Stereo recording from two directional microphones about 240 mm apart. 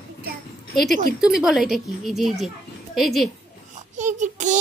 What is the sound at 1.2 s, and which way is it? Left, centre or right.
Speech, centre.